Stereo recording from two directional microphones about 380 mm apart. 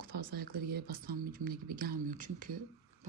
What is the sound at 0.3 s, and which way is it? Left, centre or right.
Speech, right.